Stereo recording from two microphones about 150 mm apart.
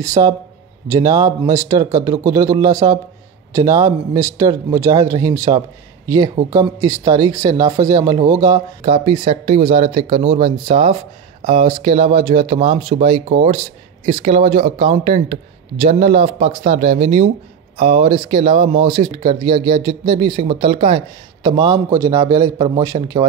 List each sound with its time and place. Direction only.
0.0 s speech: 20° right (ahead or behind)
8.8 s speech: 35° right (ahead or behind)